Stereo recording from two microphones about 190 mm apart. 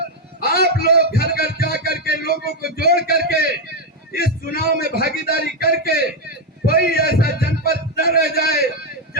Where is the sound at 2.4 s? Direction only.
50° left (ahead or behind).